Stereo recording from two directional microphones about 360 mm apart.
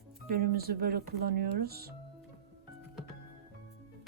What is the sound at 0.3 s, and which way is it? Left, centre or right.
Speech, right.